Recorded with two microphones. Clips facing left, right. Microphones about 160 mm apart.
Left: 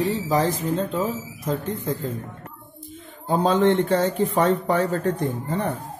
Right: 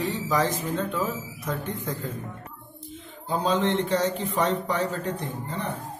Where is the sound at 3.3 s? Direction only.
50° left (ahead or behind).